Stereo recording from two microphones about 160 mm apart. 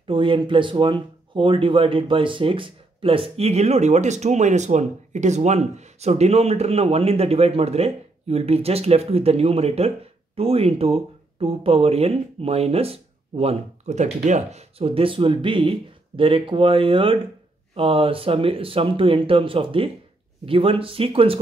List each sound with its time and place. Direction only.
0.0 s speech: 30° right (ahead or behind)